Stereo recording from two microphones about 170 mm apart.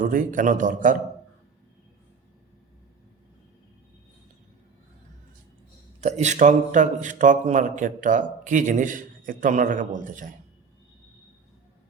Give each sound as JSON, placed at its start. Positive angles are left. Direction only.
{"t": 0.0, "sound": "speech", "side_deg": -50}
{"t": 6.0, "sound": "speech", "side_deg": -45}